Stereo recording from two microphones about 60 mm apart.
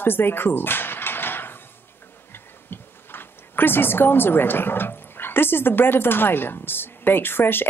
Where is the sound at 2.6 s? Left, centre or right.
Left.